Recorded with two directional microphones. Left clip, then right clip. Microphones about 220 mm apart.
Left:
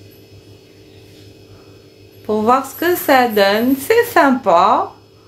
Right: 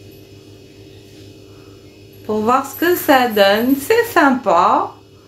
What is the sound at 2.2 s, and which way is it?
A woman's voice, 15° left (ahead or behind).